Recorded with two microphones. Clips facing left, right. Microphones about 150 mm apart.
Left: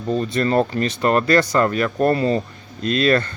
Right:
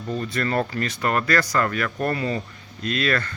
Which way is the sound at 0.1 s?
25° left (ahead or behind).